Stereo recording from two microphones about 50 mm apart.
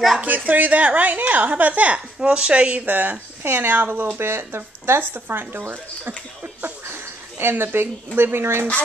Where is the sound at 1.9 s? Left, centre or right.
Centre.